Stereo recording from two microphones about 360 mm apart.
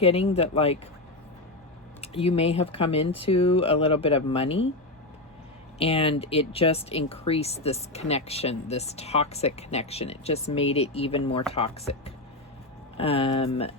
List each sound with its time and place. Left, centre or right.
0.0 s speech: centre
2.0 s speech: centre
5.8 s speech: centre